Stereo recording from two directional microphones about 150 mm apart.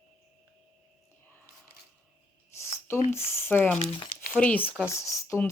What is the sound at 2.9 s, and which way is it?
Speech, 15° left (ahead or behind).